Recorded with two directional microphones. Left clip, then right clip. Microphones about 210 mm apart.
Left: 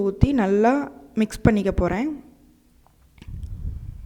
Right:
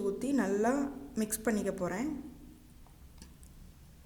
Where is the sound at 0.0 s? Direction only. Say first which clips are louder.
Left 10 dB; 35° left (ahead or behind).